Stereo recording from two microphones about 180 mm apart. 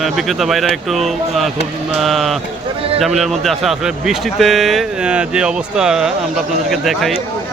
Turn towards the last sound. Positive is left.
turn(degrees=0)  # may be behind; listen again after turning